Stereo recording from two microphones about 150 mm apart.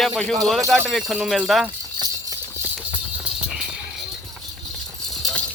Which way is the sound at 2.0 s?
25° right (ahead or behind).